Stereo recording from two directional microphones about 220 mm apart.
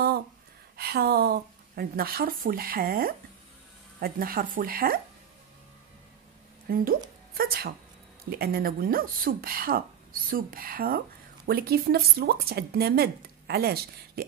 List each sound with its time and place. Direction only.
0.7 s speech: 45° right (ahead or behind)
6.7 s speech: 40° right (ahead or behind)